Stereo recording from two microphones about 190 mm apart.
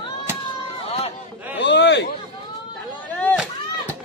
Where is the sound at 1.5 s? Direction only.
65° left (ahead or behind).